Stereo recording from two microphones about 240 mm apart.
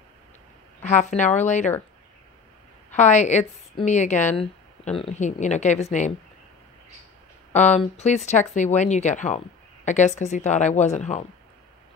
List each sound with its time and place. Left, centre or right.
0.9 s a woman's voice: left
3.0 s speech: left
7.5 s speech: left